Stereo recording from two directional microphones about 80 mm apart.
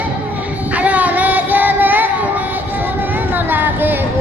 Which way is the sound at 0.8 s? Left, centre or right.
Centre.